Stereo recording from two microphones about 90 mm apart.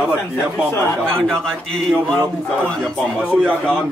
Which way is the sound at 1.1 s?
5° left (ahead or behind).